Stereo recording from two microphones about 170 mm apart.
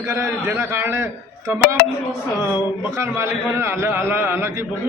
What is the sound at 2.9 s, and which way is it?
A man's voice, 15° right (ahead or behind).